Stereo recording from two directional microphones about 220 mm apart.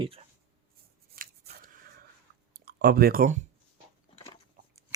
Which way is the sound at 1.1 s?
45° right (ahead or behind).